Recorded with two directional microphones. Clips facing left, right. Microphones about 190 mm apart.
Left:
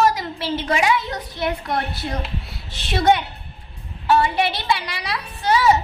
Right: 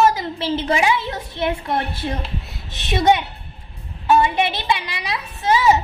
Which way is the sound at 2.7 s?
20° right (ahead or behind).